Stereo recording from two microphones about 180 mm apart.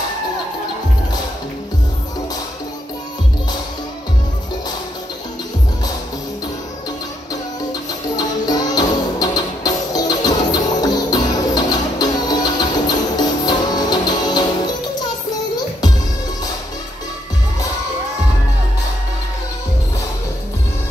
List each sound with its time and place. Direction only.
8.2 s music: 20° left (ahead or behind)